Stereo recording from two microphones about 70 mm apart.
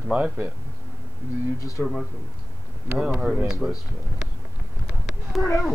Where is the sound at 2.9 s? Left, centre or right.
Centre.